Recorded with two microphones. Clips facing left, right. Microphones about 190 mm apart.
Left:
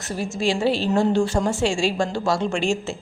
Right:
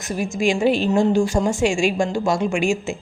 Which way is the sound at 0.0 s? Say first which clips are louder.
Right 3 dB; 15° right (ahead or behind).